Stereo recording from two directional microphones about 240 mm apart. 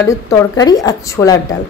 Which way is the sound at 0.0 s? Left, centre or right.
Centre.